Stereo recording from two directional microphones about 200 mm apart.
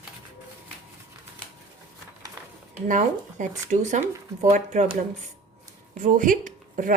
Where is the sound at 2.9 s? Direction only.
40° right (ahead or behind).